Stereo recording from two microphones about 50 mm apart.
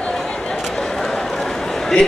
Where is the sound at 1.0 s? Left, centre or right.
Centre.